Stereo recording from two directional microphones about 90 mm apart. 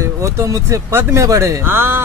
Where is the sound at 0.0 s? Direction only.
35° right (ahead or behind).